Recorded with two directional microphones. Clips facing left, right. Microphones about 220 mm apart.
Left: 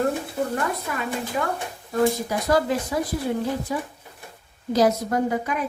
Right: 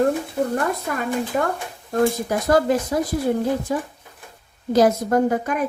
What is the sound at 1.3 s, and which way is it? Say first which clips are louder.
A woman's voice: right 4 dB; 50° right (ahead or behind).